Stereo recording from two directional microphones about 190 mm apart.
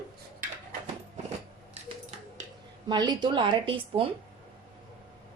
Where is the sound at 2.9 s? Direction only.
25° right (ahead or behind).